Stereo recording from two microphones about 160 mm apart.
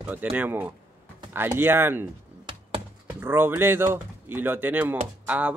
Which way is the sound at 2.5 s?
30° right (ahead or behind).